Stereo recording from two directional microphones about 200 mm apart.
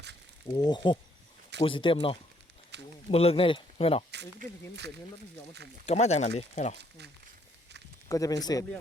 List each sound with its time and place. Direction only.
0.5 s speech: 20° left (ahead or behind)
2.7 s a sound: 60° right (ahead or behind)
3.1 s speech: 30° left (ahead or behind)
4.1 s speech: 60° right (ahead or behind)
5.8 s speech: 35° left (ahead or behind)
8.1 s speech: 15° left (ahead or behind)